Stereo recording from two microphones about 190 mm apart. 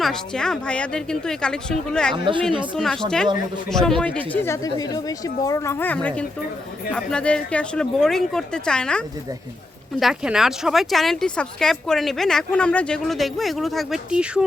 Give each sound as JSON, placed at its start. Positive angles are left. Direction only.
{"t": 0.0, "sound": "speech", "side_deg": 5}
{"t": 2.1, "sound": "a woman's voice", "side_deg": -25}
{"t": 2.7, "sound": "speech", "side_deg": 0}